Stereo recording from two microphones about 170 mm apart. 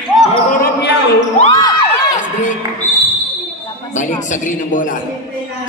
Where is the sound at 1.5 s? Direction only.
20° left (ahead or behind).